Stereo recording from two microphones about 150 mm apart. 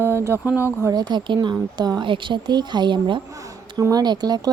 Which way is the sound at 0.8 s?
30° right (ahead or behind).